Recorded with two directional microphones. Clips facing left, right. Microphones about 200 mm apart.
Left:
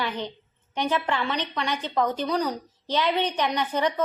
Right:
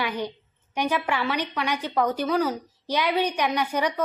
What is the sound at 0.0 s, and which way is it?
A woman's voice, 10° right (ahead or behind).